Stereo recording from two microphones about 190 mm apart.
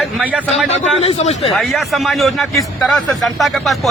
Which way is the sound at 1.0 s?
30° left (ahead or behind).